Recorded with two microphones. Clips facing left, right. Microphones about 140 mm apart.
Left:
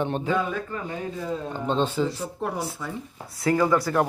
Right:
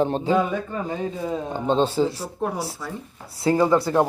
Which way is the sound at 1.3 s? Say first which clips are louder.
Right 3 dB; 20° right (ahead or behind).